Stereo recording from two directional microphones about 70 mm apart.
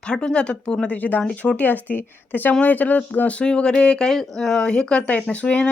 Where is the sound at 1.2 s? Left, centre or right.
Centre.